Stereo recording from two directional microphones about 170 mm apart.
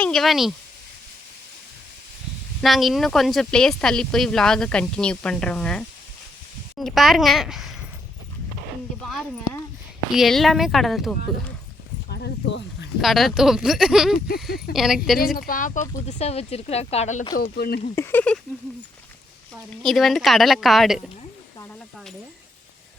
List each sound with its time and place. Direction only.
0.0 s speech: centre (ahead or behind)
2.6 s speech: centre (ahead or behind)
9.0 s speech: centre (ahead or behind)
12.0 s a sound: 80° left
13.0 s speech: centre (ahead or behind)
15.4 s speech: 55° left (ahead or behind)
16.0 s speech: 40° left (ahead or behind)
17.3 s speech: 60° left (ahead or behind)
17.9 s speech: 10° left (ahead or behind)
19.7 s speech: centre (ahead or behind)